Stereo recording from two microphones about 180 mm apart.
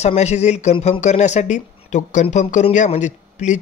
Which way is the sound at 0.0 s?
35° left (ahead or behind).